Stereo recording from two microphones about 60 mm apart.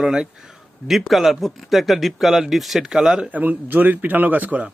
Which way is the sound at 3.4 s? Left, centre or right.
Right.